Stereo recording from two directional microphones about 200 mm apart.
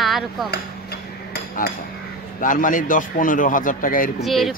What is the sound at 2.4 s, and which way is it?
A man's voice, 40° left (ahead or behind).